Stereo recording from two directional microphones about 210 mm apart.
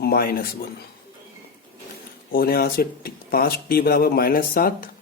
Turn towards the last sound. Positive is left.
turn(degrees=45)  # may be behind; listen again after turning